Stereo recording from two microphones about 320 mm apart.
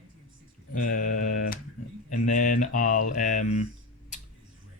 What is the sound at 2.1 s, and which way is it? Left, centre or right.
Speech, left.